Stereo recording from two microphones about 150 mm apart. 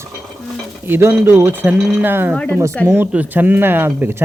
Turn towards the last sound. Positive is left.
turn(degrees=-15)  # may be behind; listen again after turning